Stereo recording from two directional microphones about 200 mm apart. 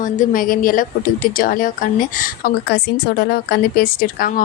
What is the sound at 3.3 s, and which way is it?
A woman's voice, 45° left (ahead or behind).